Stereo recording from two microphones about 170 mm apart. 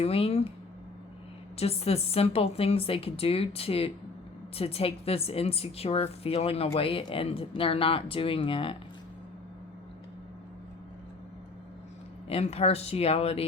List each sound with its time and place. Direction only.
0.0 s a woman's voice: 35° left (ahead or behind)
1.5 s a woman's voice: 35° left (ahead or behind)
12.3 s a woman's voice: 40° left (ahead or behind)